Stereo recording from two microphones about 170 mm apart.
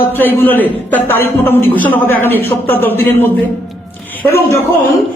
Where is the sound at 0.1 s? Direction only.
10° left (ahead or behind).